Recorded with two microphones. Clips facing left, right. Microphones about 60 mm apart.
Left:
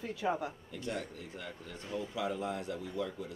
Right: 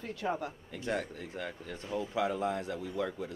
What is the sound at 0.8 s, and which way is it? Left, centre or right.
Speech, right.